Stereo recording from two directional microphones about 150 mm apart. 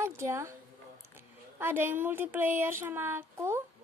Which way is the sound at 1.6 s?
15° right (ahead or behind).